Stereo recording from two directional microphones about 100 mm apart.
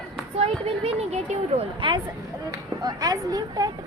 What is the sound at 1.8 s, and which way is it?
Speech, 55° right (ahead or behind).